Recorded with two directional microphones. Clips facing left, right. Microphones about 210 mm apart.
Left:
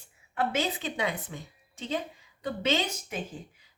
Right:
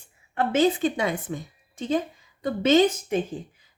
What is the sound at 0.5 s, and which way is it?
A woman's voice, 45° right (ahead or behind).